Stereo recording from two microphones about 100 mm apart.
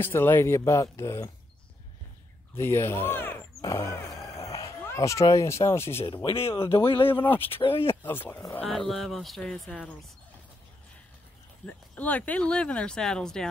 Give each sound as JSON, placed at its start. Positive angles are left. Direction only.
{"t": 0.0, "sound": "speech", "side_deg": 20}
{"t": 2.5, "sound": "speech", "side_deg": 25}
{"t": 3.6, "sound": "speech", "side_deg": 30}
{"t": 4.2, "sound": "a sound", "side_deg": 35}
{"t": 6.0, "sound": "speech", "side_deg": 60}
{"t": 7.1, "sound": "speech", "side_deg": 20}
{"t": 8.6, "sound": "speech", "side_deg": 5}
{"t": 11.6, "sound": "speech", "side_deg": 15}